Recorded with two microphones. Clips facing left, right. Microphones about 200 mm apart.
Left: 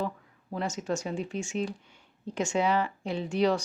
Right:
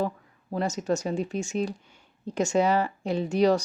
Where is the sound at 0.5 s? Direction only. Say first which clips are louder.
Right 4 dB; 40° right (ahead or behind).